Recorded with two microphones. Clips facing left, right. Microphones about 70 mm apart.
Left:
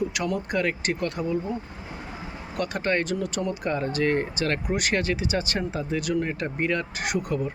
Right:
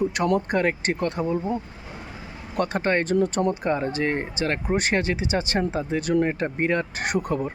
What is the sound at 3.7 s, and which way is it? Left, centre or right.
Speech, right.